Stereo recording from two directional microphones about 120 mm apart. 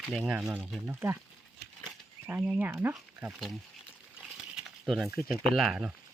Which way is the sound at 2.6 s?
15° right (ahead or behind).